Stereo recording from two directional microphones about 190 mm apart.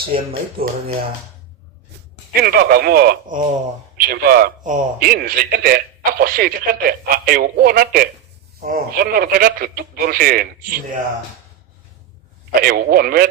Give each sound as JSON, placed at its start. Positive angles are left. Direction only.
{"t": 0.0, "sound": "a man's voice", "side_deg": -50}
{"t": 2.3, "sound": "a man's voice", "side_deg": -50}
{"t": 12.5, "sound": "a man's voice", "side_deg": -50}